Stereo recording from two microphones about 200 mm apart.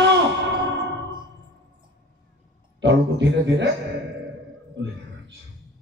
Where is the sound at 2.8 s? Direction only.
65° right (ahead or behind).